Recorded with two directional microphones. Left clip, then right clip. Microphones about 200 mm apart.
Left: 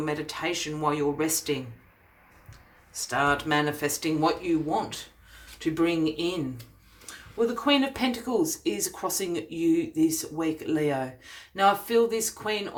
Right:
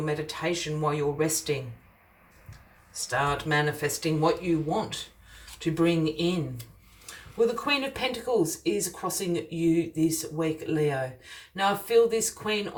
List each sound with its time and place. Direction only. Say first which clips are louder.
0.0 s speech: even; 35° left (ahead or behind)
3.1 s speech: left 2 dB; 40° left (ahead or behind)
7.6 s speech: left 3 dB; 35° left (ahead or behind)